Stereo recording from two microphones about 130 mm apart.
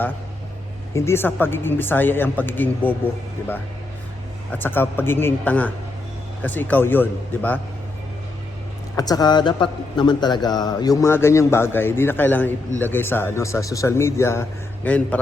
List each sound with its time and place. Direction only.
0.9 s speech: 20° left (ahead or behind)
4.5 s speech: 15° left (ahead or behind)
9.0 s a man's voice: 30° left (ahead or behind); by 15.2 s 10° left (ahead or behind)